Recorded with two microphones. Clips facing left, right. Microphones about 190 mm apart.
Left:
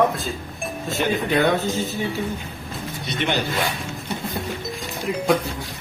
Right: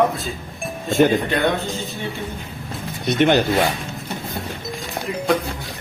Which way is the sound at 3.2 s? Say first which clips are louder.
Right 7 dB; 45° right (ahead or behind).